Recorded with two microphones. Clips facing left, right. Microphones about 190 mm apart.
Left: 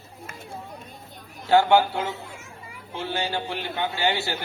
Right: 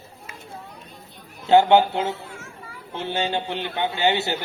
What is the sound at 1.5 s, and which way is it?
A man's voice, 20° right (ahead or behind).